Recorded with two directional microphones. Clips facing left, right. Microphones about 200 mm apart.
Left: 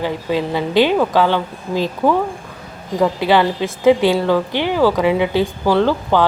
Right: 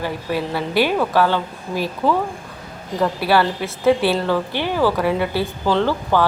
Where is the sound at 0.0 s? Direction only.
20° left (ahead or behind).